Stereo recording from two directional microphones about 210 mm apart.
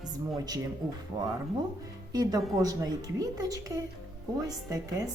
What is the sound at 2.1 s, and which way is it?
A woman's voice, 20° right (ahead or behind).